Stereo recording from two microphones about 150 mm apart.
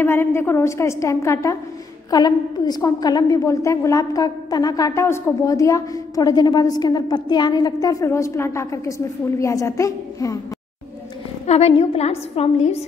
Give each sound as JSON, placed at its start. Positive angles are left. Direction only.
{"t": 0.0, "sound": "a woman's voice", "side_deg": 15}
{"t": 11.4, "sound": "a woman's voice", "side_deg": 45}